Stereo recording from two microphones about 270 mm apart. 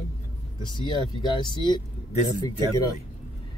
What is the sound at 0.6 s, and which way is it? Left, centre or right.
Speech, centre.